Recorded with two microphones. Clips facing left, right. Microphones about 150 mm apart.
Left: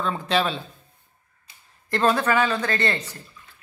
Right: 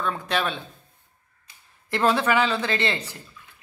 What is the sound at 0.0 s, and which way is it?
Speech, centre (ahead or behind).